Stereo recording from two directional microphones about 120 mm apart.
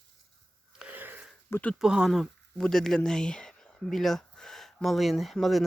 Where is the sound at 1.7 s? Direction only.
5° right (ahead or behind).